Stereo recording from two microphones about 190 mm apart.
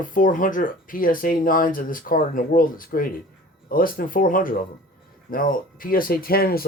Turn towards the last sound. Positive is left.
turn(degrees=50)  # may be behind; listen again after turning